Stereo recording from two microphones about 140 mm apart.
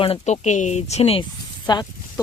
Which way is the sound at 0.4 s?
60° left (ahead or behind).